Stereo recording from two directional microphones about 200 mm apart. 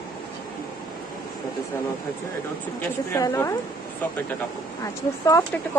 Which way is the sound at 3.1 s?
15° left (ahead or behind).